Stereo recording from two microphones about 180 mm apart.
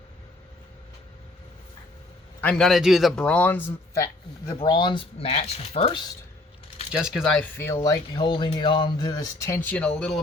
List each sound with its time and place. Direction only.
2.4 s speech: 5° left (ahead or behind); by 6.0 s 35° left (ahead or behind)
6.9 s speech: 5° right (ahead or behind); by 9.6 s 15° left (ahead or behind)
9.6 s speech: 5° left (ahead or behind)